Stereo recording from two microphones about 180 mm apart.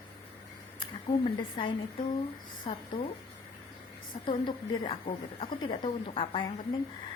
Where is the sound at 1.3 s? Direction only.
25° left (ahead or behind).